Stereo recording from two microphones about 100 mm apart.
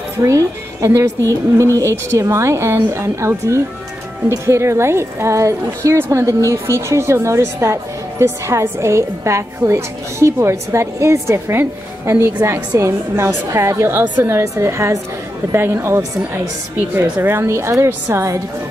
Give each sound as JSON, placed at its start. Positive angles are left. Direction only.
{"t": 0.2, "sound": "a woman's voice", "side_deg": -35}